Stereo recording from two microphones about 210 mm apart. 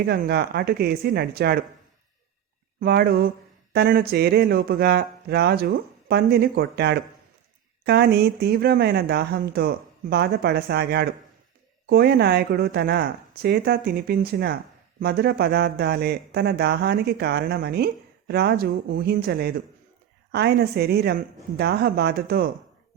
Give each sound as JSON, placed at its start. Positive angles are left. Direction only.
{"t": 0.1, "sound": "a man's voice", "side_deg": -50}
{"t": 2.8, "sound": "a man's voice", "side_deg": -50}